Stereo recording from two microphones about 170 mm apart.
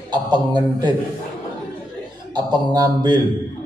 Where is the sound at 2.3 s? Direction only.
25° right (ahead or behind).